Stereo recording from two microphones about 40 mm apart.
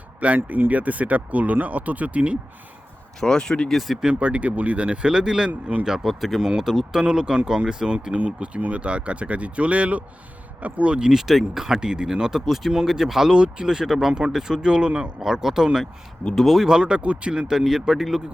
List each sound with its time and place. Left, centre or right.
0.2 s speech: right
3.2 s speech: centre
3.7 s speech: centre
4.1 s speech: right
5.5 s speech: right
5.8 s speech: centre; by 11.1 s right
11.1 s speech: centre
13.3 s speech: right
14.1 s speech: right
16.3 s speech: centre
16.6 s speech: right
17.5 s speech: centre